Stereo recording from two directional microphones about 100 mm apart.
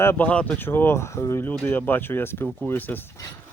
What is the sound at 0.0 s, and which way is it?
Speech, 25° left (ahead or behind).